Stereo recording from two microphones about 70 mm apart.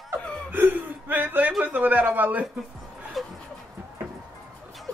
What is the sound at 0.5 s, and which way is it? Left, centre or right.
Whimper, right.